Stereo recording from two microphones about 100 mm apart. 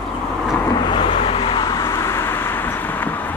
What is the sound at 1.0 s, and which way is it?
Vehicle, 65° left (ahead or behind).